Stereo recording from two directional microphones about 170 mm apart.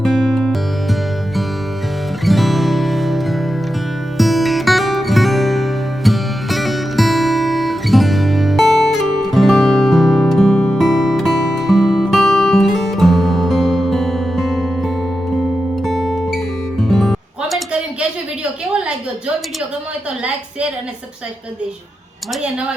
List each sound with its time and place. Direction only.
0.0 s music: 5° left (ahead or behind)
2.2 s music: centre (ahead or behind)